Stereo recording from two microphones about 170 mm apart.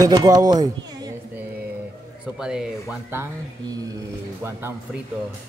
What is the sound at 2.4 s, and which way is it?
Speech, 5° right (ahead or behind).